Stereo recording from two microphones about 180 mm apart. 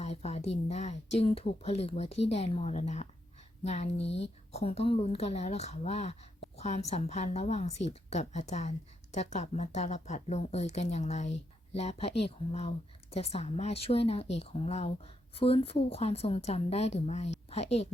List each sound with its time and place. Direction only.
0.0 s speech: 35° left (ahead or behind)
11.3 s a sound: 85° left
11.8 s speech: 35° left (ahead or behind)